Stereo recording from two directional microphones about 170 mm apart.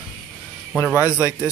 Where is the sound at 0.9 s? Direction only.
15° left (ahead or behind).